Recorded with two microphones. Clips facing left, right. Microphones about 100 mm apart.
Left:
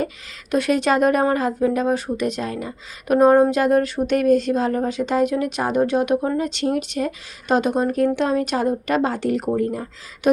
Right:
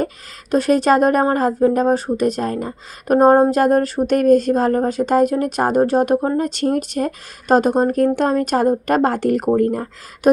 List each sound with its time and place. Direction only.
0.5 s speech: 40° right (ahead or behind)